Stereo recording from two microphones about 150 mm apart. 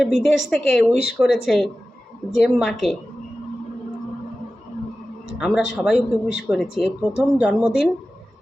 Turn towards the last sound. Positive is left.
turn(degrees=-5)  # may be behind; listen again after turning